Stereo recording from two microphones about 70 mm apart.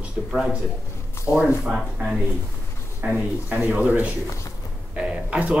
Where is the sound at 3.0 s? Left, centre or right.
Right.